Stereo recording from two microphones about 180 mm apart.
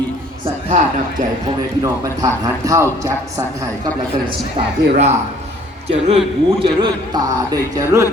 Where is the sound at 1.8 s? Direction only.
20° right (ahead or behind).